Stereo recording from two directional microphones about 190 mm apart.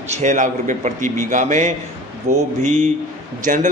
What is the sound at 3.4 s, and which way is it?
Speech, 45° right (ahead or behind).